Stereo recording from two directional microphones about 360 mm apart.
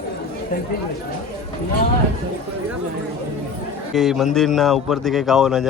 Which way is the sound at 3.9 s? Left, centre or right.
Centre.